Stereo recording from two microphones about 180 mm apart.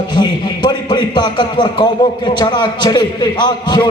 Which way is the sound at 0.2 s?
25° left (ahead or behind).